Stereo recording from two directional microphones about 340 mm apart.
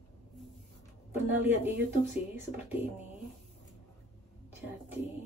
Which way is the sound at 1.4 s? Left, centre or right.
Centre.